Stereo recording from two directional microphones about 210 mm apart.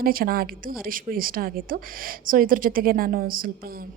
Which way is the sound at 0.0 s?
45° right (ahead or behind).